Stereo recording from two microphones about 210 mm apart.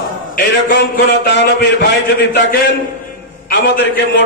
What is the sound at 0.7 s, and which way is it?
A man's voice, 55° left (ahead or behind).